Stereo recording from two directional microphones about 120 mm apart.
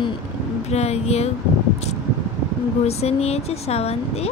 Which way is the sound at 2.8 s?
60° left (ahead or behind).